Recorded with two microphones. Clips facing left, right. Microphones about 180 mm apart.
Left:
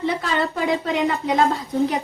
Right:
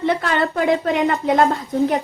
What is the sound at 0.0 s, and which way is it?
A woman's voice, 60° right (ahead or behind).